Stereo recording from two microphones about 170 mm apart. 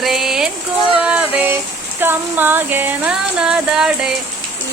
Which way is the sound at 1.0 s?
10° right (ahead or behind).